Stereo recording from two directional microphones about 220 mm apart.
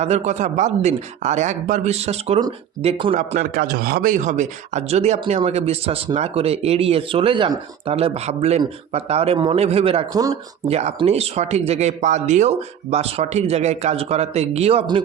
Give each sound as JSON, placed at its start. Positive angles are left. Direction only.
{"t": 0.0, "sound": "speech", "side_deg": -30}
{"t": 3.2, "sound": "a man's voice", "side_deg": -40}
{"t": 10.7, "sound": "a man's voice", "side_deg": -30}